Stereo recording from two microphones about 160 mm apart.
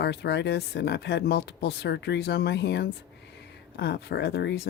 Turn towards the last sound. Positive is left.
turn(degrees=85)